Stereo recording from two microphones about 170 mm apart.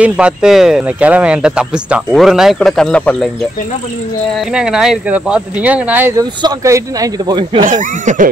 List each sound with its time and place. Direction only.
0.0 s speech: 5° right (ahead or behind)
4.6 s a man's voice: 5° right (ahead or behind); by 7.6 s 25° right (ahead or behind)
8.0 s music: 50° right (ahead or behind)